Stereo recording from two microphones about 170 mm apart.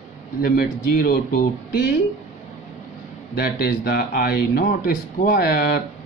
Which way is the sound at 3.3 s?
65° left (ahead or behind).